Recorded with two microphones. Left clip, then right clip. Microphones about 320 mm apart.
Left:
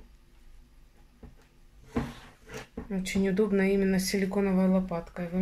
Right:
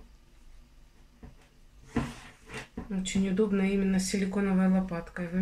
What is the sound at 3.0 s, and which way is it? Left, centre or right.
Speech, centre.